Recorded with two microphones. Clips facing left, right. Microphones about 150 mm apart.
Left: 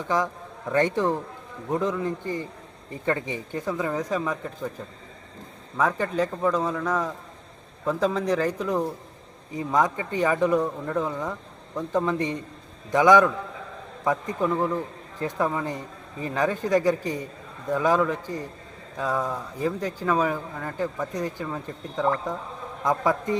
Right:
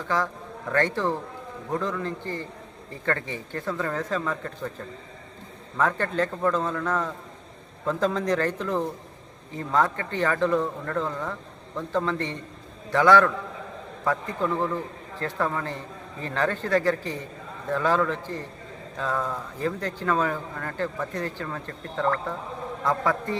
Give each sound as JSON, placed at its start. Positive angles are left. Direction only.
{"t": 0.1, "sound": "speech", "side_deg": 20}